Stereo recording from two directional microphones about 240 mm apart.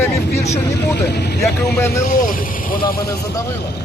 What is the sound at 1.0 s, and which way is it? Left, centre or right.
Speech, left.